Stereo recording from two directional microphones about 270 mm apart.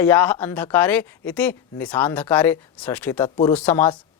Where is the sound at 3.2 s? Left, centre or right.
Centre.